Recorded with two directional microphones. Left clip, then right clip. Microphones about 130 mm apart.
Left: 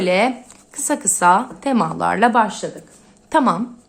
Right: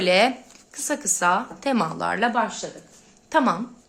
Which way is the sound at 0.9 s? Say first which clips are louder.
Left 7 dB; 20° left (ahead or behind).